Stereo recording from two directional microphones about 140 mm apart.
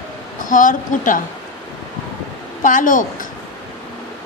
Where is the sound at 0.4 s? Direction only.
70° left (ahead or behind).